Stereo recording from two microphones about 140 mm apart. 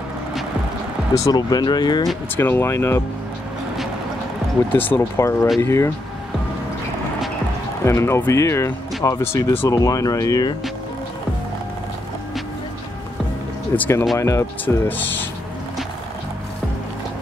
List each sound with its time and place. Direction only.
1.1 s speech: 25° left (ahead or behind)
2.3 s speech: 15° left (ahead or behind)
4.7 s speech: 15° left (ahead or behind)
7.8 s speech: 20° left (ahead or behind)
13.7 s speech: 20° left (ahead or behind)